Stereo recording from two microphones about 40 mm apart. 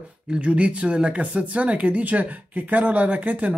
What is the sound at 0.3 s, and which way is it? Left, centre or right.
Speech, right.